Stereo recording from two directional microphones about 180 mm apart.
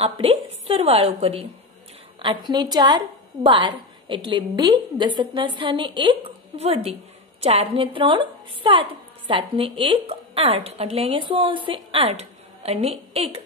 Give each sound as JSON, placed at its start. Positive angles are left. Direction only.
{"t": 0.0, "sound": "a woman's voice", "side_deg": -30}